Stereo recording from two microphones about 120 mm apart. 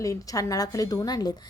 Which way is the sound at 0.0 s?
30° left (ahead or behind).